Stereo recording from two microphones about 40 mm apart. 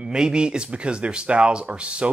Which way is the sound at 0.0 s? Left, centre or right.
Right.